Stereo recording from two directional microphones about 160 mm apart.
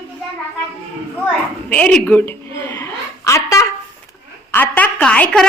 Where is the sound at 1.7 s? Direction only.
10° left (ahead or behind).